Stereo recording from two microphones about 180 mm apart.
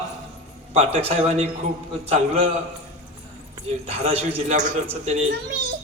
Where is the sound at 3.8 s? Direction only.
35° right (ahead or behind).